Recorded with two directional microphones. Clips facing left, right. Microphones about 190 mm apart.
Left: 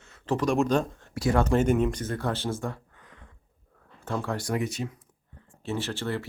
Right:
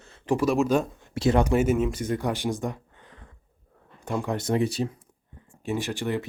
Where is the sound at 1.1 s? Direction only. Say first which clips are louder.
Right 3 dB; 25° right (ahead or behind).